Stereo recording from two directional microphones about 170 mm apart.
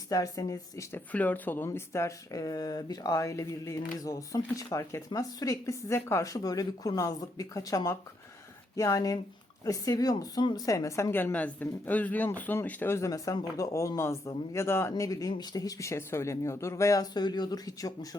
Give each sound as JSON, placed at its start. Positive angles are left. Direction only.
{"t": 0.1, "sound": "a woman's voice", "side_deg": 20}